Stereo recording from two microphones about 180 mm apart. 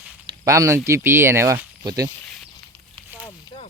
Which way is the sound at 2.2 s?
5° left (ahead or behind).